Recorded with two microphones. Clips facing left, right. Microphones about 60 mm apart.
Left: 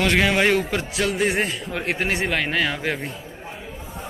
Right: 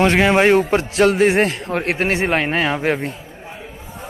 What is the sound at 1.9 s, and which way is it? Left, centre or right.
A man's voice, right.